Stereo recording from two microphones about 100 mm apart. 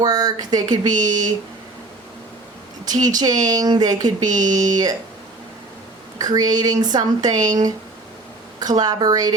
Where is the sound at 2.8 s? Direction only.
40° right (ahead or behind).